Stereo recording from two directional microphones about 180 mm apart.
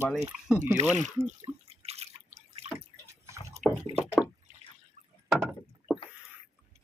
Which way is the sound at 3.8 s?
35° right (ahead or behind).